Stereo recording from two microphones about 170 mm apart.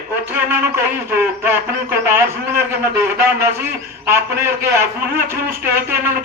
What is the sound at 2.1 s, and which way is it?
A man's voice, 15° right (ahead or behind).